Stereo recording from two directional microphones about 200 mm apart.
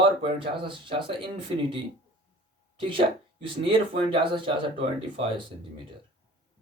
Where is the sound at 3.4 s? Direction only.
25° right (ahead or behind).